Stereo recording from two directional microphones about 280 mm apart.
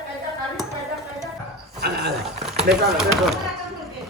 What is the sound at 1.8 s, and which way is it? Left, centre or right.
Speech, right.